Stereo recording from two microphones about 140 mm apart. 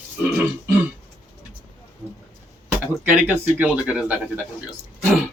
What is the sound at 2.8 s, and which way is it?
Speech, 15° right (ahead or behind).